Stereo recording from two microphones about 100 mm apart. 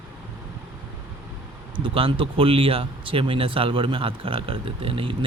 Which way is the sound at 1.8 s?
60° right (ahead or behind).